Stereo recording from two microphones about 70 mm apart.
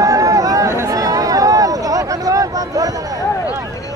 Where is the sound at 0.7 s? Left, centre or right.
Right.